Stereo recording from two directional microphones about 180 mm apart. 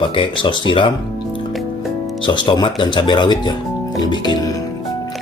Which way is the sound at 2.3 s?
25° left (ahead or behind).